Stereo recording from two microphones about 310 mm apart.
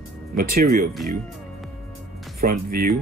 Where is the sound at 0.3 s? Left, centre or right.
Centre.